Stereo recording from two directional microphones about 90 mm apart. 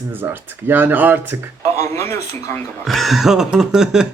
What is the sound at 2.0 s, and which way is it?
Speech, 30° left (ahead or behind).